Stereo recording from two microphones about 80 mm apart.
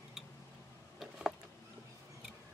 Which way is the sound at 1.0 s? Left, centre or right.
Centre.